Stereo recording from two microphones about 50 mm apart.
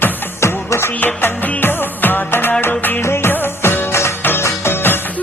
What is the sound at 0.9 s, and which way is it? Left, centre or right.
Music, left.